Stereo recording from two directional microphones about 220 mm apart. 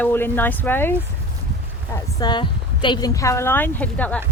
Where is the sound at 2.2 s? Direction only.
20° left (ahead or behind).